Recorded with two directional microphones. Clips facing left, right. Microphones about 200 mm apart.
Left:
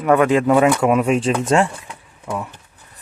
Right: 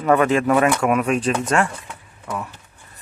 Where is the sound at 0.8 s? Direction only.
25° left (ahead or behind).